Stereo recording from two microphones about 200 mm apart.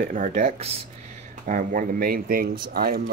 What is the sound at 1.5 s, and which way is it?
Speech, 40° right (ahead or behind).